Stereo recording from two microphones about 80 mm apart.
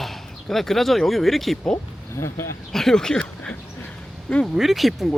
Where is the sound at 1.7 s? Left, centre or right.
Left.